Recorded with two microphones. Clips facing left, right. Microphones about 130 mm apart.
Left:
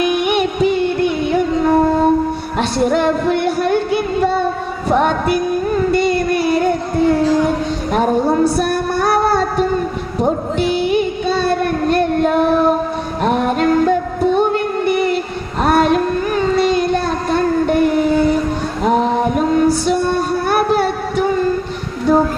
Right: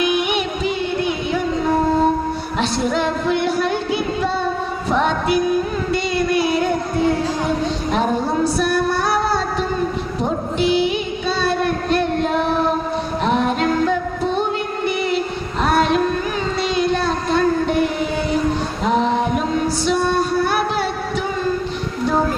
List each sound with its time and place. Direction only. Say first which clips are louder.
0.0 s music: left 4 dB; 50° left (ahead or behind)
2.6 s music: left 5 dB; 50° left (ahead or behind)
5.9 s child singing: left 4 dB; 50° left (ahead or behind)
8.5 s music: left 1 dB; 50° left (ahead or behind)
10.6 s child singing: left 1 dB; 50° left (ahead or behind)
13.2 s music: left 4 dB; 50° left (ahead or behind)
15.6 s child singing: left 3 dB; 50° left (ahead or behind)
18.9 s music: left 3 dB; 50° left (ahead or behind)